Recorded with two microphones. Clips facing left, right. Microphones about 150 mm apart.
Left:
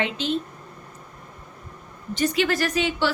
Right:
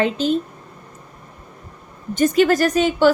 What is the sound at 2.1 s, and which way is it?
Speech, 45° right (ahead or behind).